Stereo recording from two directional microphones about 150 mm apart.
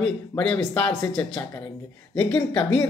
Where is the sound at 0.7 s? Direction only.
10° left (ahead or behind).